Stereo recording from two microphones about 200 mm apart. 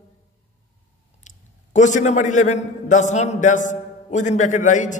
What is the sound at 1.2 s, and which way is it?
A man's voice, 40° left (ahead or behind).